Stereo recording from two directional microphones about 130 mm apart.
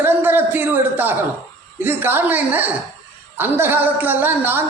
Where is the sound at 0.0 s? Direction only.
15° right (ahead or behind).